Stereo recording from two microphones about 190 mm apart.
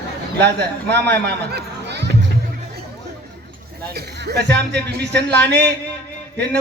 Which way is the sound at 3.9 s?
60° right (ahead or behind).